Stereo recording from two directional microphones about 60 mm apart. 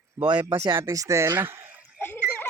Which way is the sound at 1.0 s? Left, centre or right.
Right.